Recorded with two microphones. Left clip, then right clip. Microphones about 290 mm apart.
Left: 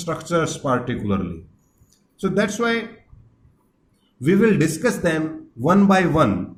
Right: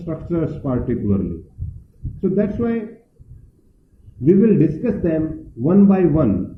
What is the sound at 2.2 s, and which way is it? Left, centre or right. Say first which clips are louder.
Speech: even; left.